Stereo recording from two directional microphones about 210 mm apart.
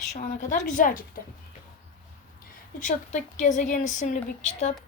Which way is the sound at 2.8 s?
35° left (ahead or behind).